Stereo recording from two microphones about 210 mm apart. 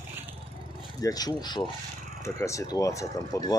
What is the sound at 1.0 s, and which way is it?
Speech, 20° left (ahead or behind).